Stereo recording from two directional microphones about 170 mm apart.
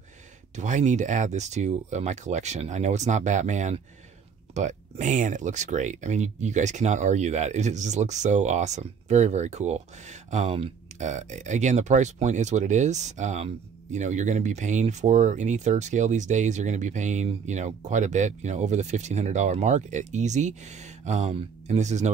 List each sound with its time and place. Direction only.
0.6 s speech: 45° right (ahead or behind)